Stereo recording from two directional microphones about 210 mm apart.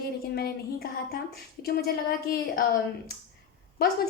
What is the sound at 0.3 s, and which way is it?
Speech, 45° left (ahead or behind).